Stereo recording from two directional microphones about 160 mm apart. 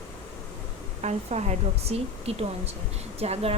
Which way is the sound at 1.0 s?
45° right (ahead or behind).